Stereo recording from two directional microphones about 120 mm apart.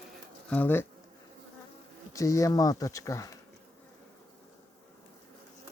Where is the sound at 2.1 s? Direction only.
25° left (ahead or behind).